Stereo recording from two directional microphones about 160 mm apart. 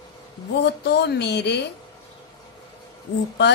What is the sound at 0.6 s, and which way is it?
Mantra, 90° left.